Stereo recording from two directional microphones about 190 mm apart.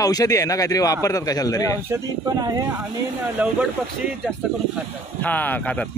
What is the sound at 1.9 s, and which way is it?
Speech, 20° right (ahead or behind).